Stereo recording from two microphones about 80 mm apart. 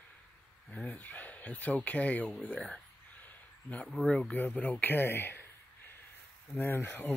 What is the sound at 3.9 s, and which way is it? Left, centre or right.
Speech, centre.